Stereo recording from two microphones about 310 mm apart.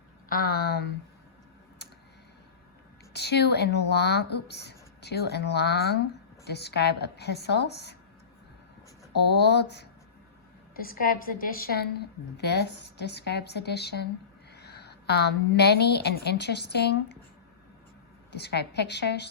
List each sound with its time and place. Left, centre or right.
0.3 s a woman's voice: left
3.1 s a woman's voice: left
9.1 s a woman's voice: left
18.3 s a woman's voice: left